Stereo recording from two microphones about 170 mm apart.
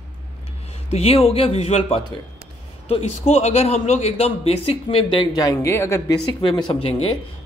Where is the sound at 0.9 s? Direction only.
35° left (ahead or behind).